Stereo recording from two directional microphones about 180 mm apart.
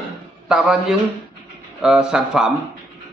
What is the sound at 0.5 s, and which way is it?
A man's voice, 5° right (ahead or behind).